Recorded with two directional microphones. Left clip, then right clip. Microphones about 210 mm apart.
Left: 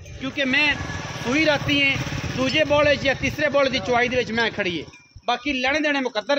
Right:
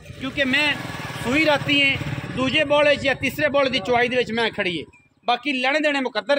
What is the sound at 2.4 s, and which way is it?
Speech, 45° right (ahead or behind).